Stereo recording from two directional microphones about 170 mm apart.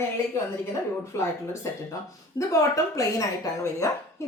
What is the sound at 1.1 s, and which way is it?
Speech, 15° left (ahead or behind).